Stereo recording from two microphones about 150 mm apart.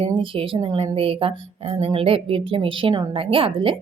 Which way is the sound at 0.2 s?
35° right (ahead or behind).